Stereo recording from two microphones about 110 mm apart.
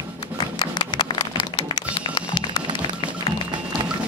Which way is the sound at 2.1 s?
45° left (ahead or behind).